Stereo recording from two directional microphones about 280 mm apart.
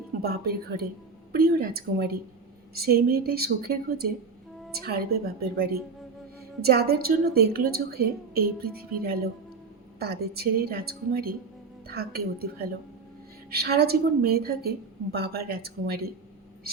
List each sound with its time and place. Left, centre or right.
0.2 s a woman's voice: right
8.8 s a woman's voice: right